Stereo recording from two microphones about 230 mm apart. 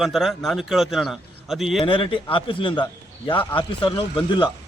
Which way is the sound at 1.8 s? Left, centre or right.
Left.